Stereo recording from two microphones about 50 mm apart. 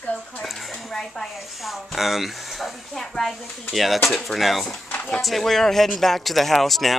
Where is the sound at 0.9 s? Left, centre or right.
Centre.